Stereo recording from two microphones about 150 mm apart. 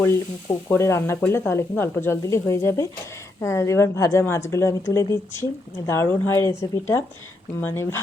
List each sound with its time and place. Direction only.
0.0 s a woman's voice: 15° left (ahead or behind)